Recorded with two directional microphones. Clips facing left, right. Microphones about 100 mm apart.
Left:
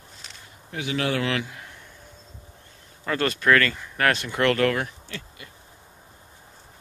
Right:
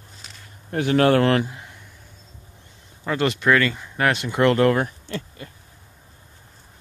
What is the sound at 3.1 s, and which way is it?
Speech, 15° right (ahead or behind).